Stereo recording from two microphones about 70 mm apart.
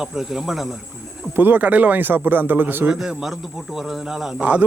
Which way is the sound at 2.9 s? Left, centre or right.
Centre.